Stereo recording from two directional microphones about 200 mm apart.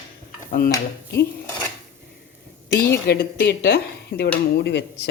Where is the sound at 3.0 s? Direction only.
55° left (ahead or behind).